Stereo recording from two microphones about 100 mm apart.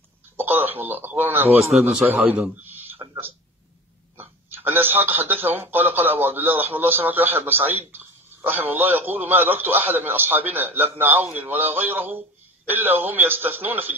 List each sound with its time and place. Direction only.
0.4 s a man's voice: 20° right (ahead or behind)
1.6 s a man's voice: 5° right (ahead or behind)
2.1 s a man's voice: 20° right (ahead or behind)
2.6 s a sound: 20° right (ahead or behind)
4.2 s a man's voice: 20° right (ahead or behind)